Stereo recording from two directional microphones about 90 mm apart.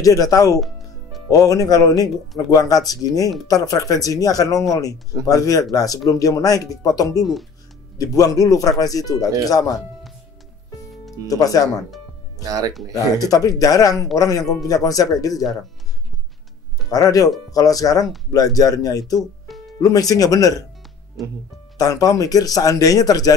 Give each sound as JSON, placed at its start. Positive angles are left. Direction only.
{"t": 0.0, "sound": "speech", "side_deg": 40}
{"t": 11.2, "sound": "speech", "side_deg": 40}
{"t": 12.4, "sound": "speech", "side_deg": -45}
{"t": 12.9, "sound": "speech", "side_deg": 40}
{"t": 16.9, "sound": "speech", "side_deg": 40}
{"t": 19.1, "sound": "music", "side_deg": 0}
{"t": 19.8, "sound": "speech", "side_deg": 40}
{"t": 21.2, "sound": "speech", "side_deg": 0}
{"t": 21.7, "sound": "speech", "side_deg": 40}